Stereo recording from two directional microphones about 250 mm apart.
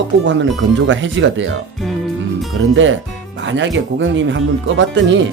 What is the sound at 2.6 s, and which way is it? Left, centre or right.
Speech, right.